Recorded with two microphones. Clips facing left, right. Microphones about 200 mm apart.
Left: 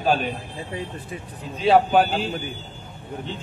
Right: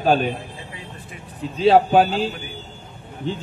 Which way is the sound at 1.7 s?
40° right (ahead or behind).